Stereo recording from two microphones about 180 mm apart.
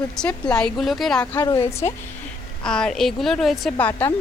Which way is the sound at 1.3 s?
25° left (ahead or behind).